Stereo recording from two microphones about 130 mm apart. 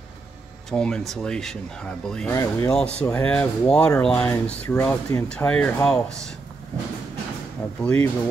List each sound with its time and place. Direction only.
0.7 s speech: 5° left (ahead or behind)
2.3 s speech: 25° left (ahead or behind)
2.7 s speech: 10° left (ahead or behind)
4.3 s speech: 20° left (ahead or behind)
5.3 s speech: 10° left (ahead or behind)
7.8 s speech: 10° left (ahead or behind)